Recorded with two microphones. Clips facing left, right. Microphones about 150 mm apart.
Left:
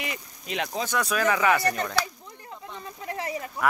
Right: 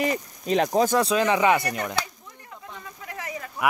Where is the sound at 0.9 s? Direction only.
25° right (ahead or behind).